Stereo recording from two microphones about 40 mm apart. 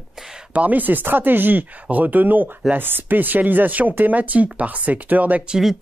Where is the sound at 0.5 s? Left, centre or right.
Right.